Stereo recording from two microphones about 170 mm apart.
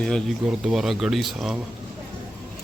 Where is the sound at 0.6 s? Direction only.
Centre (ahead or behind).